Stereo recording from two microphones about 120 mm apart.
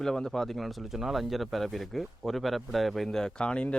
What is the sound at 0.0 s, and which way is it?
Speech, 5° left (ahead or behind).